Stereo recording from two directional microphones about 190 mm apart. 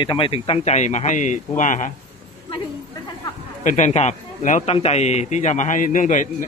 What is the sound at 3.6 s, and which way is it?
A man's voice, 40° left (ahead or behind).